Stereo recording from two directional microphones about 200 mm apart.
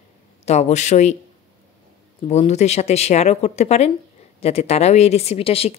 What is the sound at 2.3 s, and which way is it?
A woman's voice, 35° left (ahead or behind).